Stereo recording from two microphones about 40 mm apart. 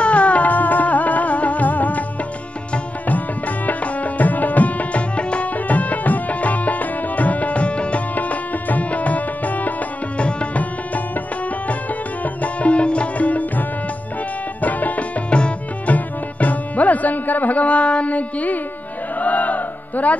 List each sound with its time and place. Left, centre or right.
0.0 s music: left
3.6 s tabla: left
5.7 s music: left
8.1 s music: left
10.1 s tabla: left
12.4 s music: left
15.2 s music: left
15.9 s music: left
19.1 s chant: left